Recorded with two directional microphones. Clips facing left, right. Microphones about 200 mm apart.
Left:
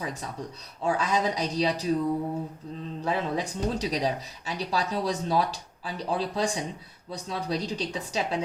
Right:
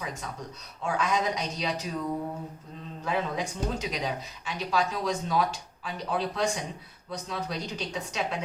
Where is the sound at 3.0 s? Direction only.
35° left (ahead or behind).